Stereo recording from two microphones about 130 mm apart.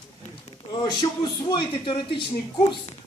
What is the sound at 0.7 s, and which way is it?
A woman's voice, 35° left (ahead or behind).